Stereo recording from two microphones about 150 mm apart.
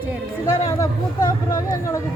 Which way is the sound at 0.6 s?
20° left (ahead or behind).